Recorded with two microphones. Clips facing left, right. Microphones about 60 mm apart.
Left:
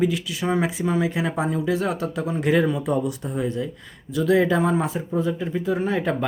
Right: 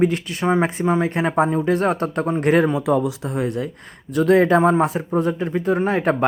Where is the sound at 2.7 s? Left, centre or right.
Right.